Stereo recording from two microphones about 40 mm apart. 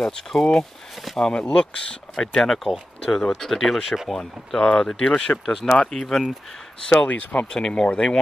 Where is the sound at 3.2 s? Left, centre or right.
Left.